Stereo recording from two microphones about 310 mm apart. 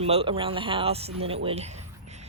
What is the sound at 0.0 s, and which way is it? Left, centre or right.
Speech, centre.